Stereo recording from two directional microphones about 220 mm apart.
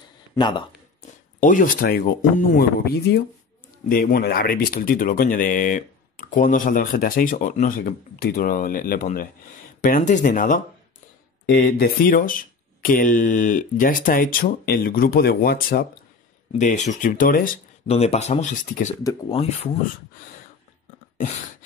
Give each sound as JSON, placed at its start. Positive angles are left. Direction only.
{"t": 0.4, "sound": "speech", "side_deg": 20}
{"t": 1.4, "sound": "speech", "side_deg": 35}
{"t": 16.5, "sound": "speech", "side_deg": 35}
{"t": 19.0, "sound": "speech", "side_deg": 20}